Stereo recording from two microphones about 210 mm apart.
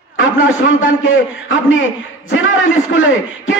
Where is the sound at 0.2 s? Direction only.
70° left (ahead or behind).